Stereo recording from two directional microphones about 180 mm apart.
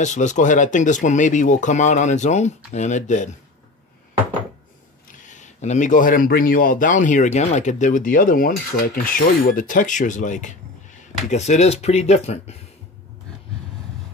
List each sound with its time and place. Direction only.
0.0 s a man's voice: 40° left (ahead or behind)
5.2 s a man's voice: 40° left (ahead or behind)